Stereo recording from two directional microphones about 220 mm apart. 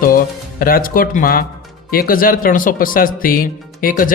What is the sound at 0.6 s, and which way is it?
A man's voice, 40° left (ahead or behind).